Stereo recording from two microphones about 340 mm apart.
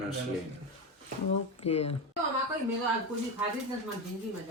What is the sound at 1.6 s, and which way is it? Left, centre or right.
Speech, centre.